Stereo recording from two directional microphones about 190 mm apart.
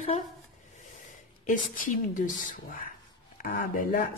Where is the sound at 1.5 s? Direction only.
45° left (ahead or behind).